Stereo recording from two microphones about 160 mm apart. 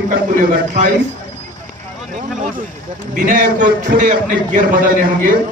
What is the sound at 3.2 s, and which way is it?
A man's voice, 60° right (ahead or behind).